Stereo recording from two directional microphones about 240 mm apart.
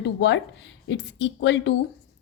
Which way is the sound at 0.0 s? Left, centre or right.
Left.